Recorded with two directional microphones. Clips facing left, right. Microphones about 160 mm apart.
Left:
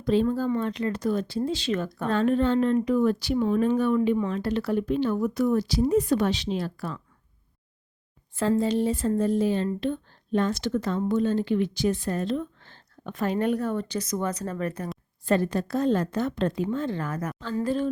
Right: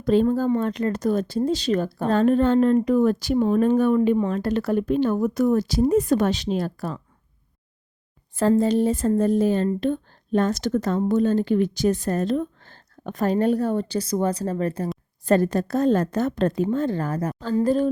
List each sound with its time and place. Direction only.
0.0 s speech: 45° right (ahead or behind)
8.4 s speech: 45° right (ahead or behind)
15.2 s speech: 45° right (ahead or behind)